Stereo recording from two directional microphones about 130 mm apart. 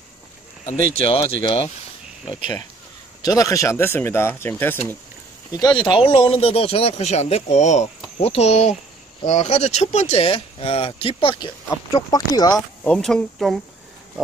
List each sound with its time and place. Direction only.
0.9 s speech: 45° left (ahead or behind)
3.2 s speech: 30° left (ahead or behind)
5.5 s speech: 30° left (ahead or behind)
12.8 s speech: 5° left (ahead or behind)